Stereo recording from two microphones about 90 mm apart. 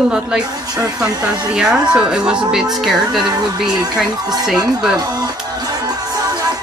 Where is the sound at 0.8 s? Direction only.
35° right (ahead or behind).